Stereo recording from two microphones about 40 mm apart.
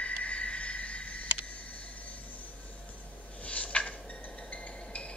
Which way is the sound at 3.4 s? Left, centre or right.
Left.